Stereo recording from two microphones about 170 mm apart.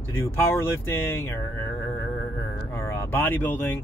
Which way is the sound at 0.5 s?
15° left (ahead or behind).